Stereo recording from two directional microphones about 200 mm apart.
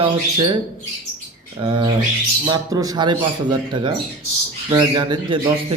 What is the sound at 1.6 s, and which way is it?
A man's voice, 20° right (ahead or behind).